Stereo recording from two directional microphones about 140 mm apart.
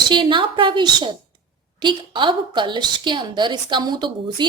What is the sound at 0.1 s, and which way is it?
A woman's voice, 35° right (ahead or behind).